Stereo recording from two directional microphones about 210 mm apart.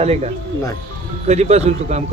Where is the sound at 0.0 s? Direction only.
30° right (ahead or behind).